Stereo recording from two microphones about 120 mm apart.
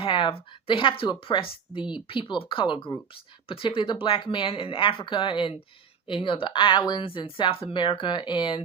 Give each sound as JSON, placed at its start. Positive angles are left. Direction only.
{"t": 0.0, "sound": "speech", "side_deg": 45}